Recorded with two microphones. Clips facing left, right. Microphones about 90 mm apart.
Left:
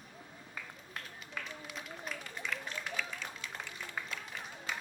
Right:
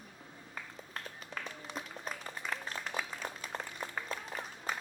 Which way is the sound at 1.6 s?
35° right (ahead or behind).